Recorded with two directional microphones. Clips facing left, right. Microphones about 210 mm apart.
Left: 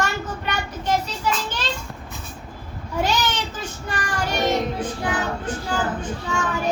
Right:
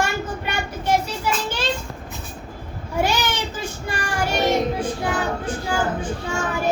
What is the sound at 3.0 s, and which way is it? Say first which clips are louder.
Child singing: right 1 dB; 10° right (ahead or behind).